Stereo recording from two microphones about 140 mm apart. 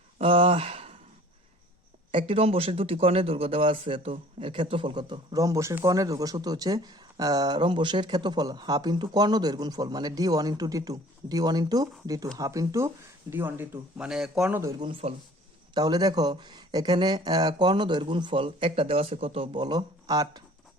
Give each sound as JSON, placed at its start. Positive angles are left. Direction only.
{"t": 0.2, "sound": "speech", "side_deg": -40}
{"t": 2.1, "sound": "speech", "side_deg": -40}
{"t": 14.5, "sound": "speech", "side_deg": -20}
{"t": 14.8, "sound": "speech", "side_deg": -40}